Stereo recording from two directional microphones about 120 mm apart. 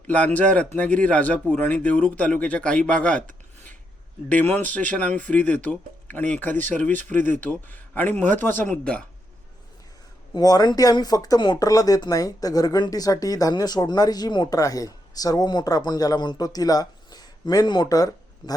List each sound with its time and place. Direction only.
0.3 s speech: 10° left (ahead or behind)
4.3 s speech: 15° left (ahead or behind)
10.3 s speech: 35° left (ahead or behind)